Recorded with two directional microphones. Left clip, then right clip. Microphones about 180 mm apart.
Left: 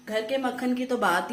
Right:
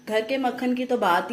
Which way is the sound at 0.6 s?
15° right (ahead or behind).